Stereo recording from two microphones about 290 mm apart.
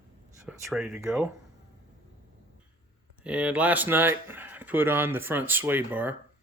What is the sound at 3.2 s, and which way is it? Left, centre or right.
Speech, centre.